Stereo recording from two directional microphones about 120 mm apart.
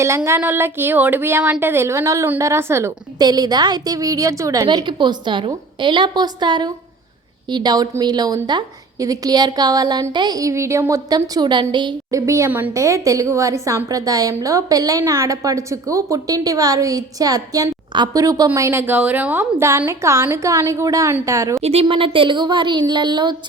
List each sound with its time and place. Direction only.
0.3 s a woman's voice: 20° right (ahead or behind)
3.2 s a woman's voice: 35° right (ahead or behind)
4.6 s a woman's voice: 40° right (ahead or behind)
12.1 s a woman's voice: 25° right (ahead or behind)
12.5 s a woman's voice: 15° right (ahead or behind)
12.7 s a woman's voice: 25° right (ahead or behind)
21.6 s a woman's voice: 55° right (ahead or behind); by 23.4 s 40° right (ahead or behind)